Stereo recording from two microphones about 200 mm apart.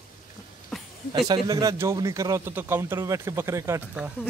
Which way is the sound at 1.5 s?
15° right (ahead or behind).